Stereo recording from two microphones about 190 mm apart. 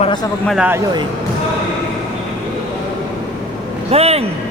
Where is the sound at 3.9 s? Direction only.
30° right (ahead or behind).